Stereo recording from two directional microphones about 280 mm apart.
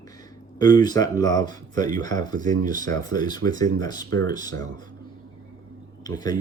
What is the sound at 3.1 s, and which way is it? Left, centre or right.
Speech, centre.